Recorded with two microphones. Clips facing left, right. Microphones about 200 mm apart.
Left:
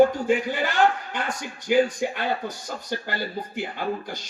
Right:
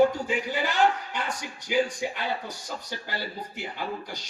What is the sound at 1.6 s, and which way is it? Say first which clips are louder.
Speech: left 5 dB; 50° left (ahead or behind).